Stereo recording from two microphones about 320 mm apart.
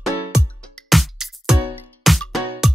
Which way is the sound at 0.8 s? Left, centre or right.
Centre.